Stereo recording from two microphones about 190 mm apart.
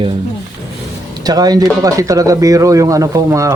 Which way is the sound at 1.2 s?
20° right (ahead or behind).